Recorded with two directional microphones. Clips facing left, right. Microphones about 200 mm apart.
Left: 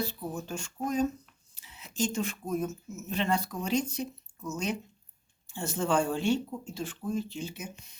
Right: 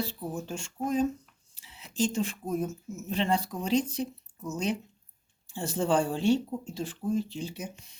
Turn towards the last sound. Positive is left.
turn(degrees=-35)  # may be behind; listen again after turning